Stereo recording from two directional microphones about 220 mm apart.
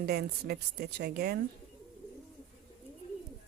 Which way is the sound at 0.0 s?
45° right (ahead or behind).